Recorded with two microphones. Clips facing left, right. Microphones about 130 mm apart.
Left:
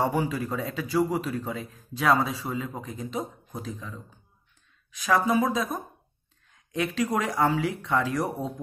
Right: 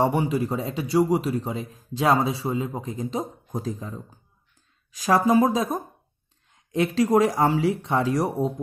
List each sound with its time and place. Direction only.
0.0 s a man's voice: 25° right (ahead or behind)